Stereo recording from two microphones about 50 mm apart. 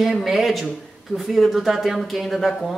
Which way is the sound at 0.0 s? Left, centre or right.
Centre.